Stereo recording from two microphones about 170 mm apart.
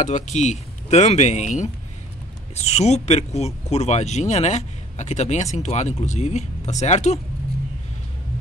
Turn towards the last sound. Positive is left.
turn(degrees=40)  # may be behind; listen again after turning